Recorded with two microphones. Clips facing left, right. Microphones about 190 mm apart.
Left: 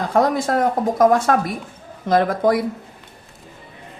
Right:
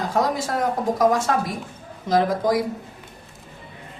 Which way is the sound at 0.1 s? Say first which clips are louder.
Left 7 dB; 55° left (ahead or behind).